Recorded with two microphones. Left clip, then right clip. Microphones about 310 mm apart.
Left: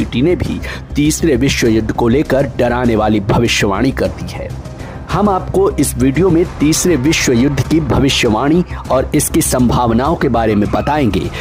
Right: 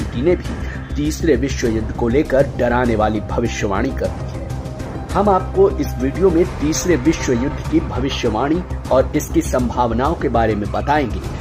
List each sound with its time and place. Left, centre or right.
0.1 s speech: left
5.1 s speech: left